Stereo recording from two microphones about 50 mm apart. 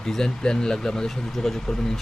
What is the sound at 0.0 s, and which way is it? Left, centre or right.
Speech, centre.